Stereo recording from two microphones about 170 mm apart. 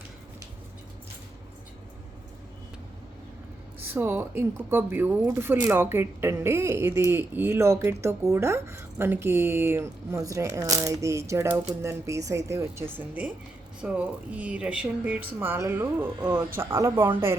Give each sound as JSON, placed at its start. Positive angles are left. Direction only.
{"t": 3.8, "sound": "speech", "side_deg": -10}